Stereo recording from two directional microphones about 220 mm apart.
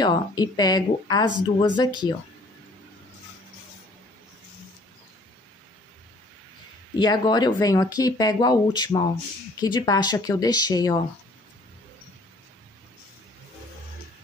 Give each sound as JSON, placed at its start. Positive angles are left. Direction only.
{"t": 0.0, "sound": "speech", "side_deg": 20}
{"t": 7.0, "sound": "speech", "side_deg": 20}